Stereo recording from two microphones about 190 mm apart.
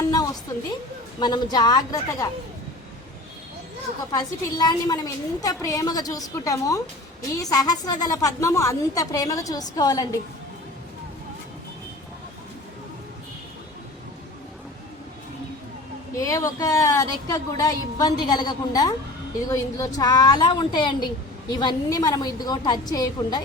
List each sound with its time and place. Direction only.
1.2 s a woman's voice: 20° left (ahead or behind)
4.1 s a woman's voice: 20° left (ahead or behind)
16.1 s a woman's voice: 15° left (ahead or behind)